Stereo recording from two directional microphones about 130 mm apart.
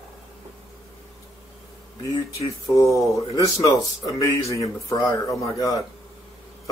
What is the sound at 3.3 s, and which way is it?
Speech, 30° left (ahead or behind).